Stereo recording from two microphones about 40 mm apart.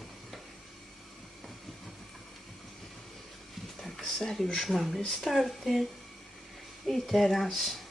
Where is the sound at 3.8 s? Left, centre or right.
Centre.